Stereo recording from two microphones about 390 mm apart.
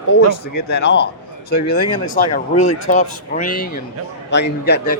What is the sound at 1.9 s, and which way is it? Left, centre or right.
Speech, centre.